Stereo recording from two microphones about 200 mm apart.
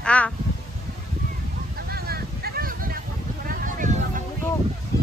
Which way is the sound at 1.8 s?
50° right (ahead or behind).